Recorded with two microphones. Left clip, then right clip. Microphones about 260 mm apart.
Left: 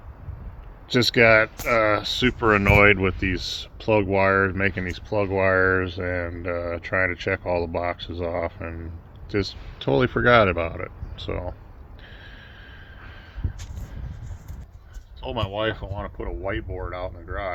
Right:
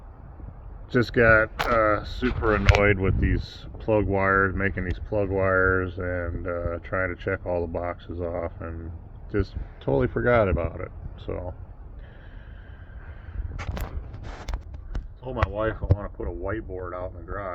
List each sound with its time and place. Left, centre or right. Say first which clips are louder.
0.9 s speech: left 2 dB; left
2.8 s speech: left 5 dB; left
3.3 s speech: left 6 dB; left
15.2 s speech: left 1 dB; centre